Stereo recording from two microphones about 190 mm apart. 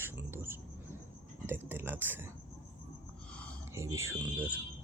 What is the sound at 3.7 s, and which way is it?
Speech, 15° right (ahead or behind).